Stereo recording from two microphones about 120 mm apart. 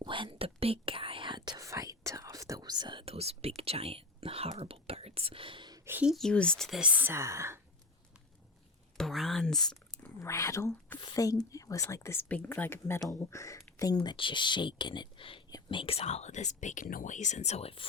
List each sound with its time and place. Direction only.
0.0 s whispering: 45° right (ahead or behind)
3.0 s whispering: 55° right (ahead or behind); by 5.8 s 40° right (ahead or behind)
5.8 s a sound: 15° right (ahead or behind)
6.1 s a woman's voice: 5° left (ahead or behind); by 7.6 s 20° right (ahead or behind)
9.0 s speech: centre (ahead or behind)
10.2 s speech: 25° left (ahead or behind)
12.3 s speech: 15° left (ahead or behind); by 17.8 s 55° left (ahead or behind)